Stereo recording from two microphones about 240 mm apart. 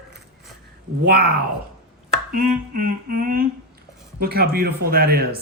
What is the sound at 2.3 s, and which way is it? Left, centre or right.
A man's voice, right.